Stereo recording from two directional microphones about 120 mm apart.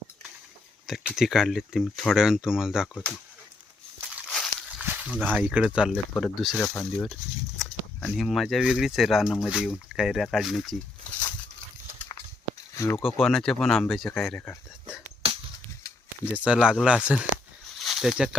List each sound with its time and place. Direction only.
0.9 s speech: 5° right (ahead or behind)
4.8 s speech: 10° right (ahead or behind)
11.1 s a sound: 10° left (ahead or behind)
12.7 s speech: 25° left (ahead or behind)
13.1 s speech: 5° left (ahead or behind)
15.2 s a sound: 55° right (ahead or behind)
16.2 s speech: 10° right (ahead or behind)
17.7 s snake: centre (ahead or behind)